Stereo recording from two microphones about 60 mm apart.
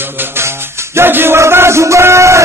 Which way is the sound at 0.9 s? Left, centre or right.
Right.